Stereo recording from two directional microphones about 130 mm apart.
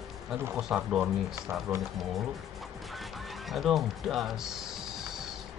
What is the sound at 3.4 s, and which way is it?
Speech, centre (ahead or behind).